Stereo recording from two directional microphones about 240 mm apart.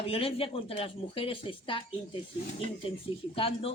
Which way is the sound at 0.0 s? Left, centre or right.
Left.